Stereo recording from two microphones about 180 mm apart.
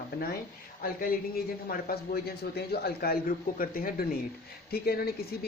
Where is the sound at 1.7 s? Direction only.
60° left (ahead or behind).